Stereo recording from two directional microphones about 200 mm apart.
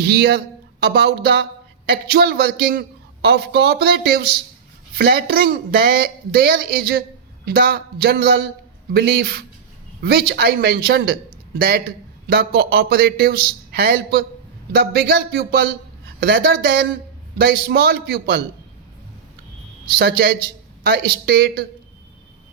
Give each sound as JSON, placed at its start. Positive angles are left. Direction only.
{"t": 0.0, "sound": "a man's voice", "side_deg": -50}
{"t": 20.0, "sound": "a man's voice", "side_deg": -50}